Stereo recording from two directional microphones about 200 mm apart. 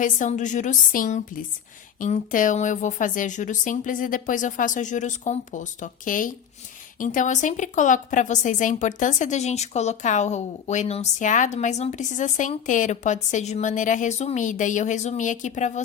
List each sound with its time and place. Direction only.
0.0 s a woman's voice: 40° left (ahead or behind)